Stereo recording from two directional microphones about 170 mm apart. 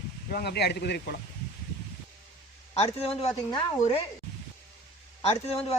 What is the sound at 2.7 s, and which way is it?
Speech, 35° left (ahead or behind).